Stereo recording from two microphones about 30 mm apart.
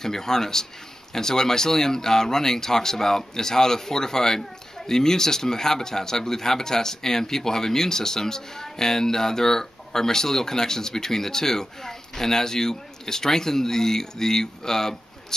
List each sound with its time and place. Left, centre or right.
0.0 s speech: centre